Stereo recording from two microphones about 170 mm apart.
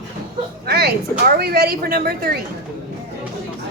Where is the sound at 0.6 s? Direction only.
70° right (ahead or behind).